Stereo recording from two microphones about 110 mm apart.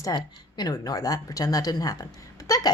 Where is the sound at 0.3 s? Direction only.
40° left (ahead or behind).